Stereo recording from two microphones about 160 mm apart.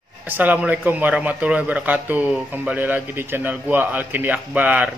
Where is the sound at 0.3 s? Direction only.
10° right (ahead or behind).